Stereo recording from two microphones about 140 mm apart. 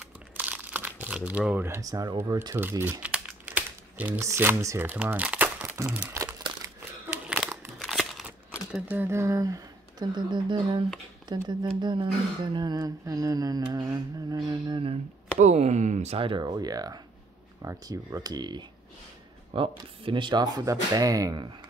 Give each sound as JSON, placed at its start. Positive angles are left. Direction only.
{"t": 0.4, "sound": "speech", "side_deg": -10}
{"t": 2.8, "sound": "crumpling", "side_deg": -10}
{"t": 5.9, "sound": "speech", "side_deg": -10}
{"t": 7.2, "sound": "crumpling", "side_deg": -5}
{"t": 7.8, "sound": "a sound", "side_deg": 0}
{"t": 8.8, "sound": "speech", "side_deg": -15}
{"t": 15.3, "sound": "speech", "side_deg": -55}